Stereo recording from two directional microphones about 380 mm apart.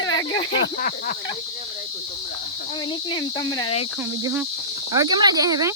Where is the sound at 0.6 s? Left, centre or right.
Left.